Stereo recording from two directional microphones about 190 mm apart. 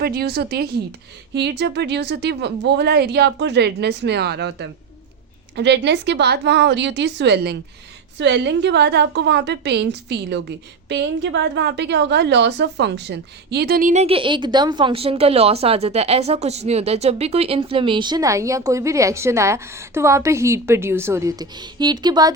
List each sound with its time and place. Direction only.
0.0 s a woman's voice: 55° right (ahead or behind); by 22.3 s 20° right (ahead or behind)